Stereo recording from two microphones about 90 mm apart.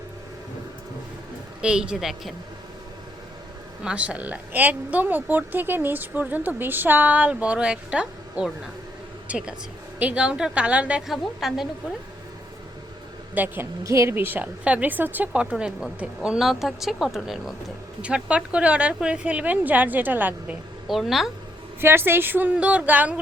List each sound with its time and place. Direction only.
1.6 s a woman's voice: 10° right (ahead or behind)
3.8 s a woman's voice: 15° right (ahead or behind)
11.0 s a woman's voice: centre (ahead or behind)
13.3 s a woman's voice: 20° right (ahead or behind)
13.8 s a woman's voice: 35° right (ahead or behind)
20.8 s speech: centre (ahead or behind)
21.8 s a woman's voice: 25° right (ahead or behind)